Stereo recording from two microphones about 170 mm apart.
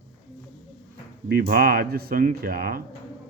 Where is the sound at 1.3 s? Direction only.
60° right (ahead or behind).